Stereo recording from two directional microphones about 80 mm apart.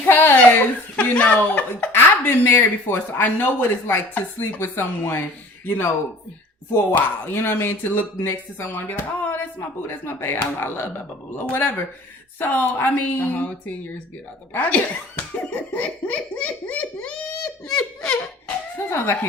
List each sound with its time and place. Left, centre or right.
0.1 s chuckle: left
0.9 s speech: centre
17.7 s laughter: centre
18.8 s speech: left